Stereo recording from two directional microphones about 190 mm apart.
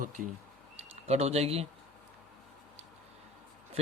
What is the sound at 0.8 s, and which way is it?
Speech, 35° right (ahead or behind).